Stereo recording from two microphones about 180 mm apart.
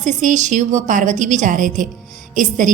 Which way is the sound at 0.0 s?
45° right (ahead or behind).